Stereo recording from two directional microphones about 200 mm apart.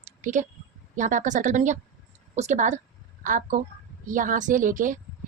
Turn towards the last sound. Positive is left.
turn(degrees=-40)  # may be behind; listen again after turning